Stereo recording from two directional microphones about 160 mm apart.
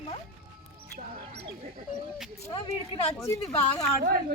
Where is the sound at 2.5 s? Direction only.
35° left (ahead or behind).